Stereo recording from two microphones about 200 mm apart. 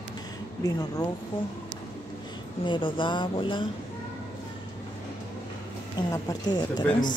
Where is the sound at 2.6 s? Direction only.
25° left (ahead or behind).